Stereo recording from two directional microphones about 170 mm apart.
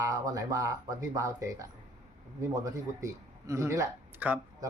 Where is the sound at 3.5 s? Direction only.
15° right (ahead or behind).